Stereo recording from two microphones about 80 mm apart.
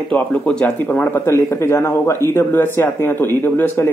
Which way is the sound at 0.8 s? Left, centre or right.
Left.